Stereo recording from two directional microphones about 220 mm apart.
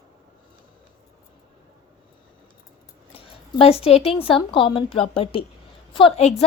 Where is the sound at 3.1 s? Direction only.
25° left (ahead or behind).